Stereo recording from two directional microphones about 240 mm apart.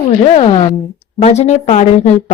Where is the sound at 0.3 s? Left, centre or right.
Left.